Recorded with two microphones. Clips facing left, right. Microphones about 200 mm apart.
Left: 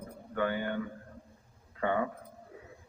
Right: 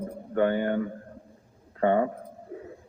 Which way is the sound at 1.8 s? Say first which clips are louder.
Right 8 dB; 40° right (ahead or behind).